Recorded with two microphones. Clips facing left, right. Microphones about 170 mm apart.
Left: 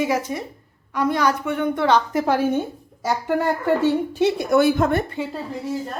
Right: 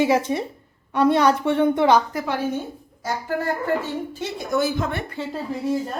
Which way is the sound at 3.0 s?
75° left (ahead or behind).